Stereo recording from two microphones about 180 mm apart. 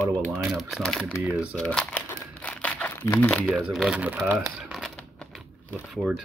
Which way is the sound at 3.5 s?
5° right (ahead or behind).